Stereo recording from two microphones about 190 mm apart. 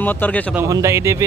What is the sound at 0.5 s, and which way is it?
Speech, 15° right (ahead or behind).